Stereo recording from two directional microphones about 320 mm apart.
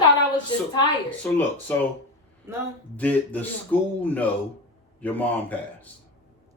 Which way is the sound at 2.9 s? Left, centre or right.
Centre.